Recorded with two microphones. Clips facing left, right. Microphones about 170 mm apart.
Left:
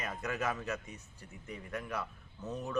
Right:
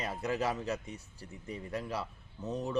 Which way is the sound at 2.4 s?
15° right (ahead or behind).